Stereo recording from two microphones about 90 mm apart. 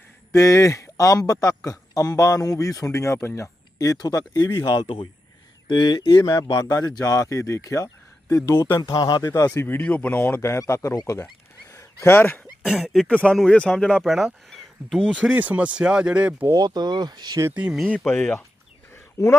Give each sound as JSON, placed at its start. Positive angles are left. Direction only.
{"t": 0.3, "sound": "speech", "side_deg": 35}
{"t": 8.8, "sound": "speech", "side_deg": 50}
{"t": 9.2, "sound": "speech", "side_deg": 40}
{"t": 9.6, "sound": "speech", "side_deg": 20}
{"t": 10.4, "sound": "speech", "side_deg": 30}
{"t": 11.7, "sound": "a sound", "side_deg": 35}
{"t": 12.0, "sound": "speech", "side_deg": 25}
{"t": 12.6, "sound": "speech", "side_deg": 0}
{"t": 13.1, "sound": "speech", "side_deg": 15}
{"t": 14.5, "sound": "a sound", "side_deg": 5}
{"t": 15.1, "sound": "speech", "side_deg": -15}
{"t": 16.6, "sound": "speech", "side_deg": -50}
{"t": 17.5, "sound": "speech", "side_deg": -15}
{"t": 18.1, "sound": "speech", "side_deg": 20}